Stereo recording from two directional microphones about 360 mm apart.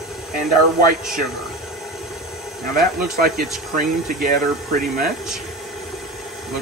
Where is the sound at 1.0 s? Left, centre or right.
Centre.